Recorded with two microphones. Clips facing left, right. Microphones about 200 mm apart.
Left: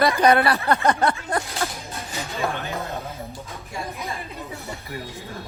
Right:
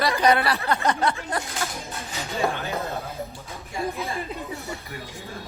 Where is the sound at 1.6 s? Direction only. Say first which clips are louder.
Left 3 dB; 40° left (ahead or behind).